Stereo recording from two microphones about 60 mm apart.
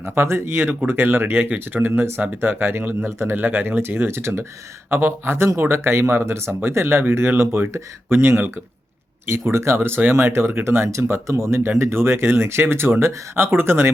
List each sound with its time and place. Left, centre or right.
0.0 s speech: right
3.3 s speech: right